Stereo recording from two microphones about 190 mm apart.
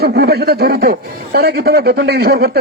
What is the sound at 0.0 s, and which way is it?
A man's voice, 55° right (ahead or behind).